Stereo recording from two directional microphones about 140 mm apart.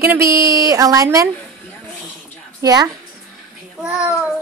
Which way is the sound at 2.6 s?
25° right (ahead or behind).